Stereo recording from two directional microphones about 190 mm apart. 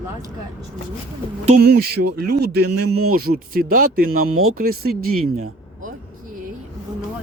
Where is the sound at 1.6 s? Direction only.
55° right (ahead or behind).